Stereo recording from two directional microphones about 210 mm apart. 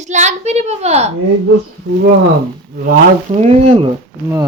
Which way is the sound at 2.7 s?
45° right (ahead or behind).